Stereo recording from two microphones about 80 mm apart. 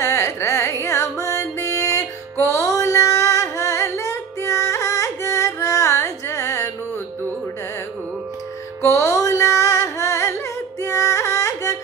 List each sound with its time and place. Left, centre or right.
0.0 s music: left
8.8 s music: left